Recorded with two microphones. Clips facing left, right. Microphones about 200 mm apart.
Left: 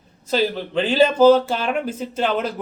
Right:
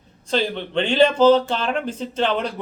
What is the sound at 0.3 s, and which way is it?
Speech, 5° left (ahead or behind).